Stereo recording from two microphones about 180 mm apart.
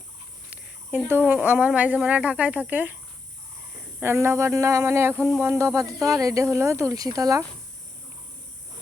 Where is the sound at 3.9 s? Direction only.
15° right (ahead or behind).